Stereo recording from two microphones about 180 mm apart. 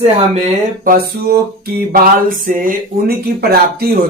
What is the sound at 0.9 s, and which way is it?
Music, 55° right (ahead or behind).